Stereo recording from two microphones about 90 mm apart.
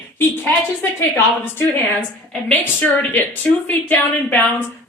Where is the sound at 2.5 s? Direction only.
20° left (ahead or behind).